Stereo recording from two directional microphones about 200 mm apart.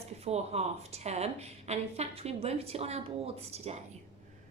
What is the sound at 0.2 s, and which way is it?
A woman's voice, 30° right (ahead or behind).